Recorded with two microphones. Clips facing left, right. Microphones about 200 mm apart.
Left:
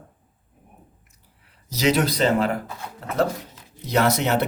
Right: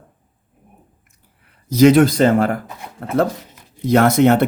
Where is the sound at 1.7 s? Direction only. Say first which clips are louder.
Right 10 dB; 50° right (ahead or behind).